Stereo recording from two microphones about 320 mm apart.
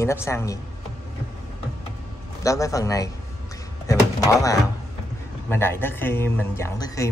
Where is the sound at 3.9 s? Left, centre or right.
Centre.